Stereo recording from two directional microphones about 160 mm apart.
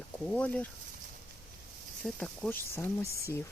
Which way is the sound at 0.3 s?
5° left (ahead or behind).